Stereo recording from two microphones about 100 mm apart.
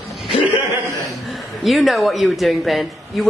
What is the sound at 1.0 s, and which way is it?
Speech, centre (ahead or behind).